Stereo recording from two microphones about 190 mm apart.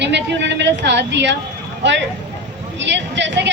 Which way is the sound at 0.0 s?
65° right (ahead or behind).